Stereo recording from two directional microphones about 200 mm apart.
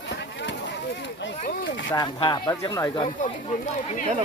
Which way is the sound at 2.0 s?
20° left (ahead or behind).